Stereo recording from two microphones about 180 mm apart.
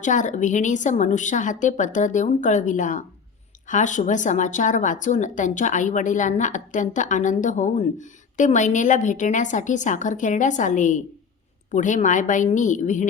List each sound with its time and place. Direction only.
0.0 s a woman's voice: 45° left (ahead or behind)